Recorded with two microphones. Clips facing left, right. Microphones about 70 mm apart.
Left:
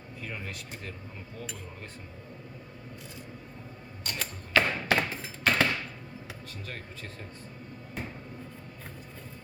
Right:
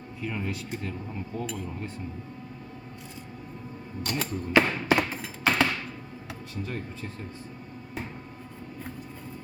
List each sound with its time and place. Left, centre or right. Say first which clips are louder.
4.0 s speech: right 7 dB; centre
4.9 s music: right 3 dB; centre